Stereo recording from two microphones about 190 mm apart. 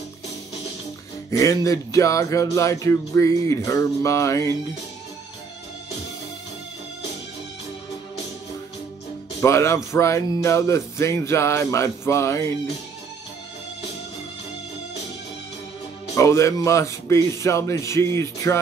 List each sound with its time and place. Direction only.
1.3 s music: 15° left (ahead or behind)
9.4 s music: 15° left (ahead or behind)
16.2 s music: 15° left (ahead or behind)